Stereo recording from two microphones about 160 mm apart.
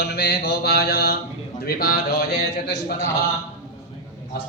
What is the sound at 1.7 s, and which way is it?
A man's voice, 70° left (ahead or behind).